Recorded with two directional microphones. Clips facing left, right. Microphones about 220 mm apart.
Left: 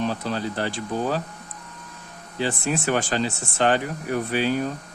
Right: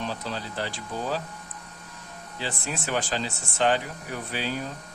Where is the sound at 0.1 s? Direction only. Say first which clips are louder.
Left 6 dB; 55° left (ahead or behind).